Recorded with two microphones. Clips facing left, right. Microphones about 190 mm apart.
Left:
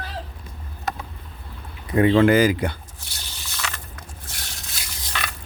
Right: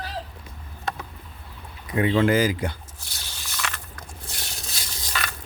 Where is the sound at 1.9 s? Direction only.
50° left (ahead or behind); by 2.8 s 65° left (ahead or behind).